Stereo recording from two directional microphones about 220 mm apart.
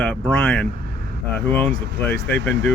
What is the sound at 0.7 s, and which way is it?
Vehicle, 45° right (ahead or behind).